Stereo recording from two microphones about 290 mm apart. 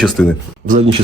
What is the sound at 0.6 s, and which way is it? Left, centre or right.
Speech, right.